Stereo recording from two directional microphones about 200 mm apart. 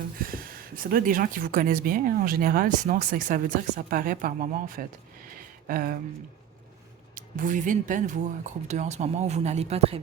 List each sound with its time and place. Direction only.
0.2 s speech: 45° right (ahead or behind)
5.3 s a sound: 45° right (ahead or behind)
7.2 s speech: 40° right (ahead or behind)